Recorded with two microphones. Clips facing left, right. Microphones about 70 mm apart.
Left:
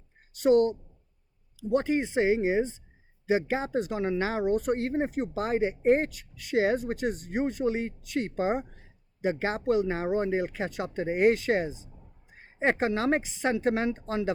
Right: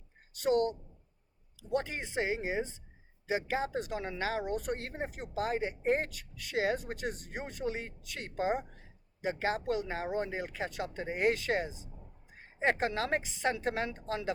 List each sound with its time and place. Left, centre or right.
0.3 s speech: left
1.7 s speech: left